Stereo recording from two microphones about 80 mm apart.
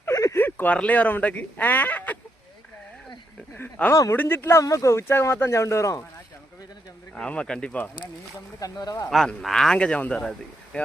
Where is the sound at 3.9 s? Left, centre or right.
Left.